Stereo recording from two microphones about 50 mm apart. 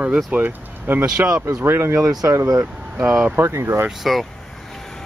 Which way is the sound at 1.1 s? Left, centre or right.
Centre.